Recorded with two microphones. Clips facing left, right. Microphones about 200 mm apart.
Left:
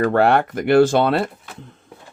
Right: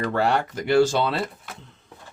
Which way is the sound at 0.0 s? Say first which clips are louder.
Left 7 dB; 60° left (ahead or behind).